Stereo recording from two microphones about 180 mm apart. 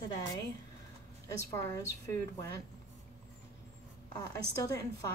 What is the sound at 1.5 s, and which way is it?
Speech, 15° left (ahead or behind).